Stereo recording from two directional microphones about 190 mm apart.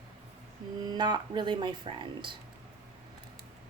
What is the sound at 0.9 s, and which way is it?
Speech, 20° right (ahead or behind).